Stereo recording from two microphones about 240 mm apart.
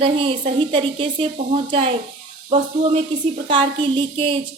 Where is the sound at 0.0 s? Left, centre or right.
Right.